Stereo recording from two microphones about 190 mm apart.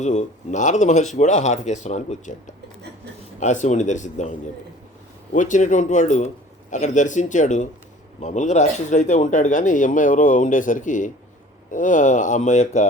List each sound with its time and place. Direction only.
0.0 s speech: 40° left (ahead or behind)
3.4 s a man's voice: 40° left (ahead or behind)